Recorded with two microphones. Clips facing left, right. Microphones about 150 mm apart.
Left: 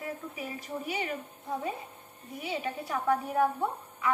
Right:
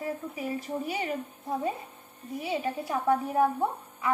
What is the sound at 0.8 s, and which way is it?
Speech, 35° right (ahead or behind).